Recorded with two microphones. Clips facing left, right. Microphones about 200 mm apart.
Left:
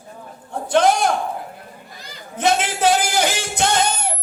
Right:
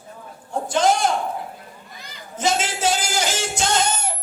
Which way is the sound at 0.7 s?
60° left (ahead or behind).